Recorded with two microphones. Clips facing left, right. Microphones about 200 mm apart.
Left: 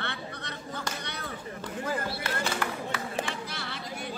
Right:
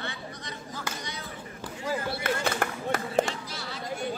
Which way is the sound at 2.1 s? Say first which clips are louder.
Right 3 dB; 50° right (ahead or behind).